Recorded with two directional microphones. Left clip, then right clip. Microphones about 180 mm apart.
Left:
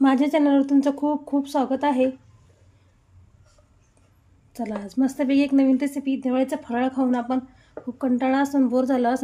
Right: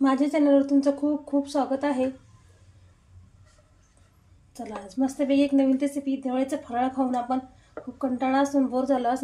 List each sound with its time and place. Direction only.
0.0 s speech: 55° left (ahead or behind)
4.8 s speech: 60° left (ahead or behind)